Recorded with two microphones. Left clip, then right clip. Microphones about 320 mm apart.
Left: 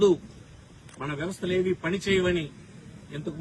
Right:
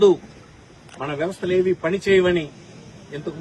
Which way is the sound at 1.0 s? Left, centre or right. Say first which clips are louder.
Right 7 dB; centre.